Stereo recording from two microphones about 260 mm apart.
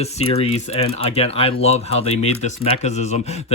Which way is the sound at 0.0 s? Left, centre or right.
Left.